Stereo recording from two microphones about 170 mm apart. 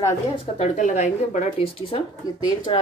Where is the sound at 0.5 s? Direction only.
45° left (ahead or behind).